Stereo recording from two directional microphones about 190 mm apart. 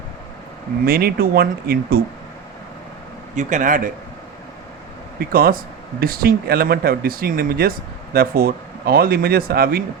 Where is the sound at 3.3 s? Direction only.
40° right (ahead or behind).